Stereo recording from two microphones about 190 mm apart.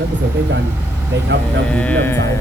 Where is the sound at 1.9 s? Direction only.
10° left (ahead or behind).